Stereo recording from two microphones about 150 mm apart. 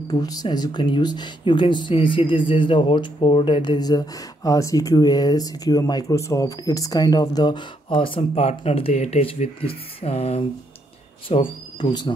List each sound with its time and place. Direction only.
0.1 s speech: 25° left (ahead or behind)